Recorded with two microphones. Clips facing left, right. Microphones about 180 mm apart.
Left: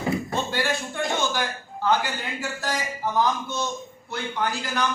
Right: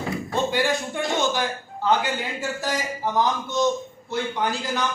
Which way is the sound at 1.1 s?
20° right (ahead or behind).